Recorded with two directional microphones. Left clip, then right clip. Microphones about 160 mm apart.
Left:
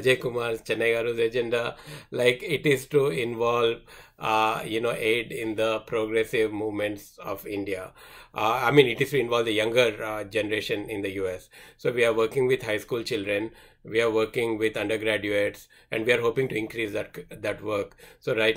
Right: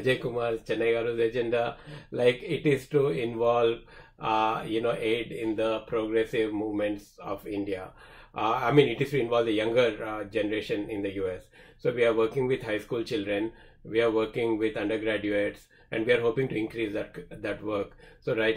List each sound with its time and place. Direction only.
0.0 s speech: 15° left (ahead or behind)